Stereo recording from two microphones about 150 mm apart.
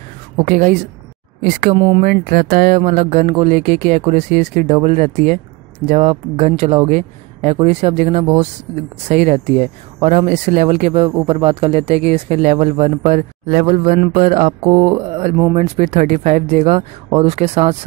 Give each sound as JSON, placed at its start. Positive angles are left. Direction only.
{"t": 0.5, "sound": "speech", "side_deg": -60}
{"t": 1.8, "sound": "speech", "side_deg": -40}
{"t": 2.0, "sound": "speech", "side_deg": -65}
{"t": 11.1, "sound": "speech", "side_deg": -30}
{"t": 14.7, "sound": "mantra", "side_deg": -30}
{"t": 15.0, "sound": "speech", "side_deg": -40}
{"t": 15.5, "sound": "speech", "side_deg": -50}